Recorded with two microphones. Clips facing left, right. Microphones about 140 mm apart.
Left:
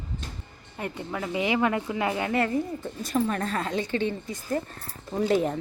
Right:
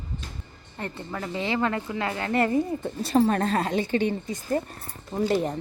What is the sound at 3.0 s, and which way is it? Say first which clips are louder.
Speech: right 5 dB; 35° right (ahead or behind).